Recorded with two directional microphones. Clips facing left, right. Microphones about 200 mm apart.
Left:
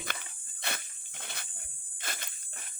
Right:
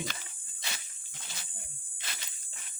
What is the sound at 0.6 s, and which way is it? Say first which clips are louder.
Dog: left 5 dB; 60° left (ahead or behind).